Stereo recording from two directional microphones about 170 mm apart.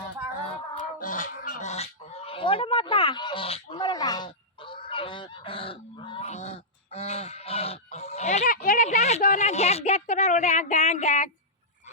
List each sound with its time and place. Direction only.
0.9 s honk: 55° left (ahead or behind); by 6.2 s 30° left (ahead or behind)
6.2 s honk: 40° left (ahead or behind)